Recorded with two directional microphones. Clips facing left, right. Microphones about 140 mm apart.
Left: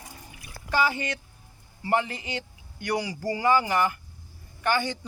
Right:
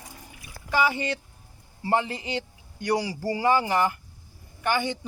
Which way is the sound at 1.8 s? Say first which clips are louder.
Right 1 dB; 25° right (ahead or behind).